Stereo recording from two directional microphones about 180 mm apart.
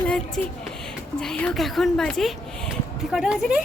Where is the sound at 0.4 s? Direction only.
5° left (ahead or behind).